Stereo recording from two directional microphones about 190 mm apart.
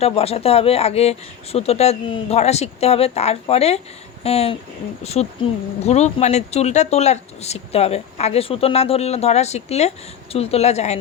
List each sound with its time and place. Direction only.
0.0 s speech: 30° left (ahead or behind)